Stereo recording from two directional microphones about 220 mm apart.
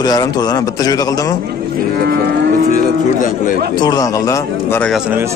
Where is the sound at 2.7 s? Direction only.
35° left (ahead or behind).